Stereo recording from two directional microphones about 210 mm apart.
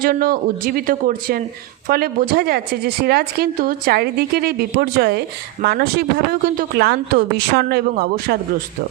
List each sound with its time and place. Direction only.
0.0 s a woman's voice: 45° right (ahead or behind)